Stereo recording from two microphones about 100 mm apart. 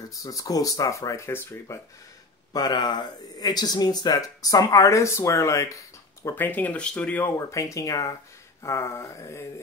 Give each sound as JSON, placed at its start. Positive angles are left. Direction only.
{"t": 0.1, "sound": "speech", "side_deg": 35}
{"t": 2.5, "sound": "speech", "side_deg": 45}
{"t": 6.3, "sound": "speech", "side_deg": 20}
{"t": 7.3, "sound": "speech", "side_deg": 30}